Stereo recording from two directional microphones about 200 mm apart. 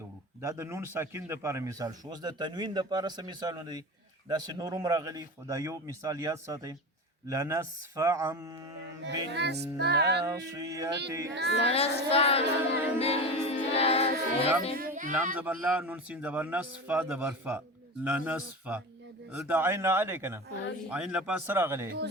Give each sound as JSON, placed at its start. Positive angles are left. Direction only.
{"t": 0.4, "sound": "a man's voice", "side_deg": -15}
{"t": 9.0, "sound": "music", "side_deg": -60}
{"t": 10.2, "sound": "speech", "side_deg": -20}
{"t": 11.3, "sound": "music", "side_deg": -60}
{"t": 11.6, "sound": "child singing", "side_deg": 30}
{"t": 13.0, "sound": "music", "side_deg": 30}
{"t": 14.8, "sound": "speech", "side_deg": -45}
{"t": 15.4, "sound": "speech", "side_deg": -5}